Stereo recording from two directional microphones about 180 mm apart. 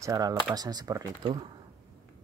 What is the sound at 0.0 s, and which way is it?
Speech, 15° right (ahead or behind).